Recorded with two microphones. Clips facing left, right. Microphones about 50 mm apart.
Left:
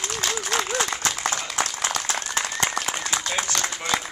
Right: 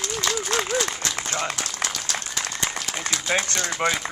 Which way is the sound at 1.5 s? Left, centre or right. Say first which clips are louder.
Left 4 dB; left.